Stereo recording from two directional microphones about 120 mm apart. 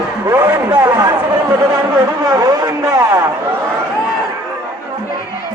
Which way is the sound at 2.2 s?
35° right (ahead or behind).